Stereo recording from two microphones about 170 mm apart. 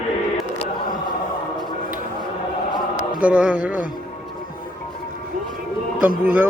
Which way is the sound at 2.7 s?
25° left (ahead or behind).